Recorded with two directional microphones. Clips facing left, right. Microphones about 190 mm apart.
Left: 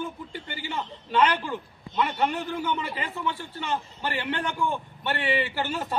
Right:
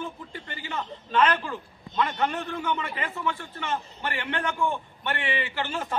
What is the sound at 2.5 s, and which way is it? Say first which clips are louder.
A man's voice: left 1 dB; 30° left (ahead or behind).